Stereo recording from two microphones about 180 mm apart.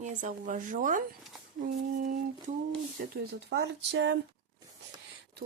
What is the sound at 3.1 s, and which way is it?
Speech, 70° right (ahead or behind).